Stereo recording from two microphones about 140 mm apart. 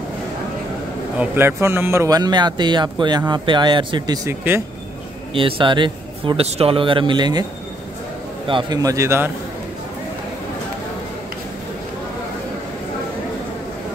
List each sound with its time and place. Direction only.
1.1 s a man's voice: 10° right (ahead or behind)
5.3 s speech: 35° right (ahead or behind)
8.5 s a man's voice: 35° right (ahead or behind)